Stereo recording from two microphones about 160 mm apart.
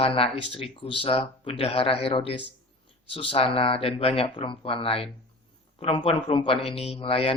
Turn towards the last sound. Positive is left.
turn(degrees=35)  # may be behind; listen again after turning